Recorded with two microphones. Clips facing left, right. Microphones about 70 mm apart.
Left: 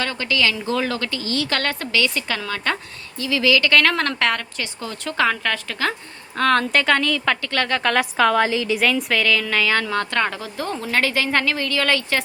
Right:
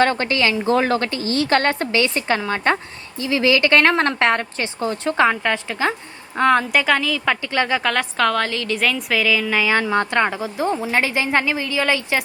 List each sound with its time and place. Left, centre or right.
0.0 s a woman's voice: right; by 7.3 s centre
7.4 s a woman's voice: centre
7.8 s a woman's voice: centre